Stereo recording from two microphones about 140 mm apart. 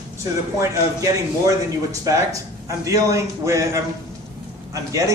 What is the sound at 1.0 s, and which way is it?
A man's voice, 25° right (ahead or behind).